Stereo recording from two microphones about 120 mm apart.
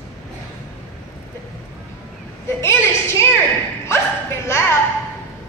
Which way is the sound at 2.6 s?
20° left (ahead or behind).